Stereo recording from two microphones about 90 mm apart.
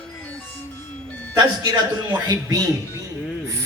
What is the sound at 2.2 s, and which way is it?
Speech, 45° right (ahead or behind).